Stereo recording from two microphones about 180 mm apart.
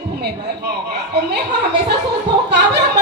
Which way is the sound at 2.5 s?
70° right (ahead or behind).